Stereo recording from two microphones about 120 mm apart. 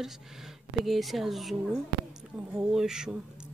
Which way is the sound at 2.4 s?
20° right (ahead or behind).